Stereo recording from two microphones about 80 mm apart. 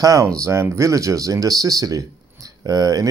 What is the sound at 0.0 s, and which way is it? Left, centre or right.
Speech, right.